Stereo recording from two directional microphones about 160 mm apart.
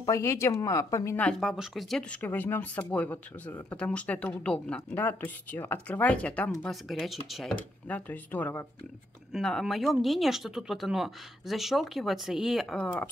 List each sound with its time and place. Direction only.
0.0 s speech: 20° left (ahead or behind); by 7.5 s centre (ahead or behind)
7.9 s speech: 10° left (ahead or behind)